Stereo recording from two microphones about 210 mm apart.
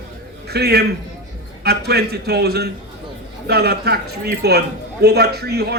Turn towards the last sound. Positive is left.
turn(degrees=-50)  # may be behind; listen again after turning